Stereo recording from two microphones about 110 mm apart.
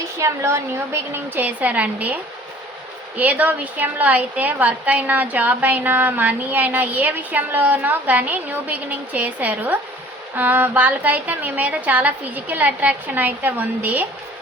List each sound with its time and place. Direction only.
0.2 s a woman's voice: 25° right (ahead or behind)
3.2 s a woman's voice: 15° right (ahead or behind)